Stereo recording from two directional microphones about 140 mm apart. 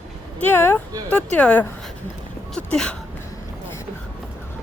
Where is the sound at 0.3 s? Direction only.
15° left (ahead or behind).